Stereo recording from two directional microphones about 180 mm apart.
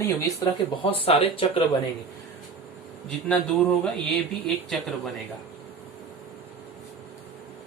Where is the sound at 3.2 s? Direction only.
5° left (ahead or behind).